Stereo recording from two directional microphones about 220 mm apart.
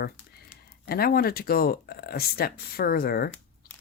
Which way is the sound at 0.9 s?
45° left (ahead or behind).